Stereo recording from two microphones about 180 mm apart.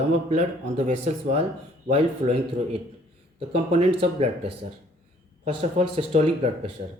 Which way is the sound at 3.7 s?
35° right (ahead or behind).